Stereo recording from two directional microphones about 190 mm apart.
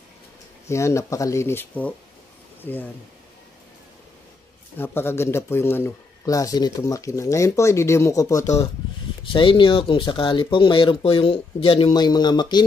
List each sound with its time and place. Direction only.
0.7 s speech: 15° left (ahead or behind)
4.7 s speech: 10° left (ahead or behind)